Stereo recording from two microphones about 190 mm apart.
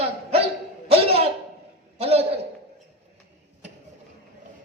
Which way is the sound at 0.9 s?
30° right (ahead or behind).